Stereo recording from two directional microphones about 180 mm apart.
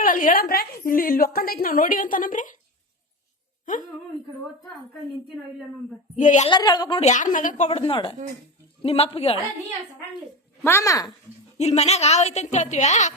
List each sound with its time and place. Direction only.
0.0 s a woman's voice: 50° left (ahead or behind)
6.1 s a woman's voice: 45° left (ahead or behind)
6.5 s a woman's voice: 20° left (ahead or behind)
7.0 s a woman's voice: 45° left (ahead or behind)
10.6 s a child's voice: 15° left (ahead or behind)
11.5 s a woman's voice: 35° left (ahead or behind)